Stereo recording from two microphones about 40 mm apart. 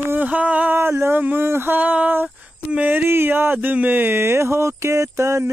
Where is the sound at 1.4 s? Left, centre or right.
Right.